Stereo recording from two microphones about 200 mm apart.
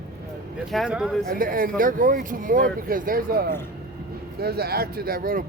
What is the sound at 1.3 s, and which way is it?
Speech, 45° right (ahead or behind).